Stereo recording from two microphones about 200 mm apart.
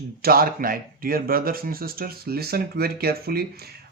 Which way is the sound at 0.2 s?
50° right (ahead or behind).